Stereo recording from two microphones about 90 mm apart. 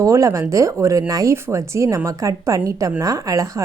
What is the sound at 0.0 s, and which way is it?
A woman's voice, 35° right (ahead or behind).